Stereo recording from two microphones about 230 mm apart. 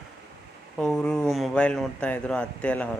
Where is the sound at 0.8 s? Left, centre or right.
Centre.